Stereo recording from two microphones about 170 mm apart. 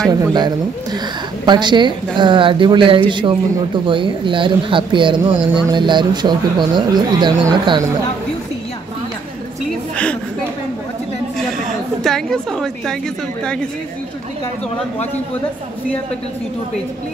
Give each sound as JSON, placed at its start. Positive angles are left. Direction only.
{"t": 0.0, "sound": "speech", "side_deg": -20}
{"t": 12.0, "sound": "a woman's voice", "side_deg": 0}